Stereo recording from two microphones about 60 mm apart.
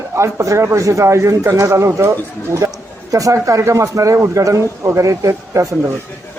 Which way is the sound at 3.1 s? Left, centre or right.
Right.